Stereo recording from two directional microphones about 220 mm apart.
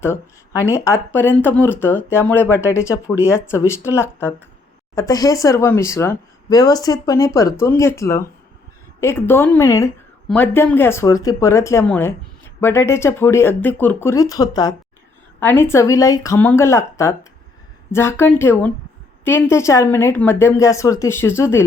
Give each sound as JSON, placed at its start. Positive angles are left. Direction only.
{"t": 0.0, "sound": "speech", "side_deg": 10}